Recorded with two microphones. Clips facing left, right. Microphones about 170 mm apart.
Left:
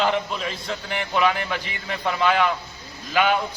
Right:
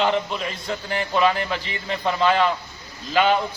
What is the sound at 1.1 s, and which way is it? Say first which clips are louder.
Speech: right 1 dB; 20° right (ahead or behind).